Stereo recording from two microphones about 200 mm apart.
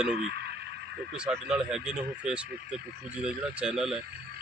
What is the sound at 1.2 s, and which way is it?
Speech, 5° right (ahead or behind).